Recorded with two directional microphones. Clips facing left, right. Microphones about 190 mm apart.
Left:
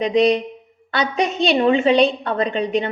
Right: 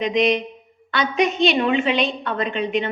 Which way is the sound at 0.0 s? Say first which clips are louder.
Left 3 dB; 35° left (ahead or behind).